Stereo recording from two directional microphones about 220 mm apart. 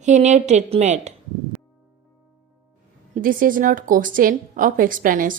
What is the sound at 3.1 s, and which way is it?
Speech, 40° right (ahead or behind).